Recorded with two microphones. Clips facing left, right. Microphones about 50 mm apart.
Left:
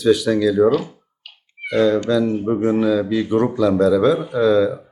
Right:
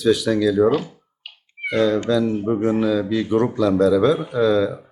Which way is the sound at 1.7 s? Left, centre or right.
Centre.